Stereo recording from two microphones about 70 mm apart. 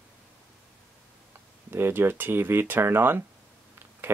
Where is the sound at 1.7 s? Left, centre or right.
Right.